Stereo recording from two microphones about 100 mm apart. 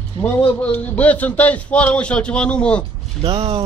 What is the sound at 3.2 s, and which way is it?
Speech, 70° right (ahead or behind).